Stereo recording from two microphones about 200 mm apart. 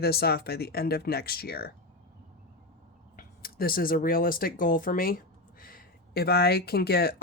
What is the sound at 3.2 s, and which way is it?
Speech, 50° left (ahead or behind).